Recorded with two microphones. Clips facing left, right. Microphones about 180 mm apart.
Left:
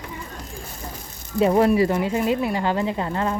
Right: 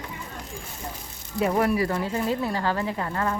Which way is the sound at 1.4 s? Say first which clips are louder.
Left 6 dB; 25° left (ahead or behind).